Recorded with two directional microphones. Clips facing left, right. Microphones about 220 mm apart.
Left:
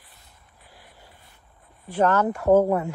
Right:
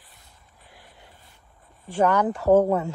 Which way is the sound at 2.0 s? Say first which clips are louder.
Even; 15° right (ahead or behind).